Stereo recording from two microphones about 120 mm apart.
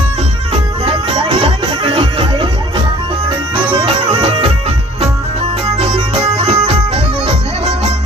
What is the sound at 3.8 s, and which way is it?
Music, 50° right (ahead or behind).